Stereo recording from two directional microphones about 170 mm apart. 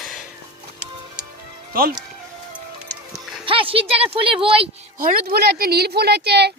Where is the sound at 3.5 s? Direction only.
30° right (ahead or behind).